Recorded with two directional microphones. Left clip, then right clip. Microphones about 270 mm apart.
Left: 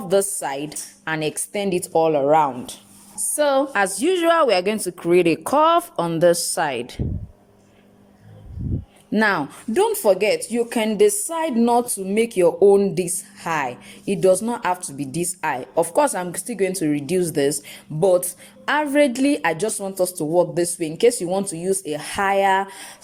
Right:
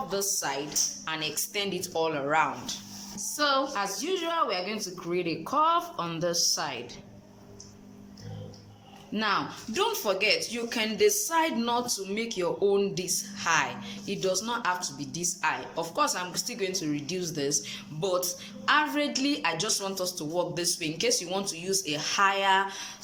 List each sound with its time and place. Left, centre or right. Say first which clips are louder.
0.1 s a woman's voice: left 13 dB; left
9.1 s speech: left 8 dB; left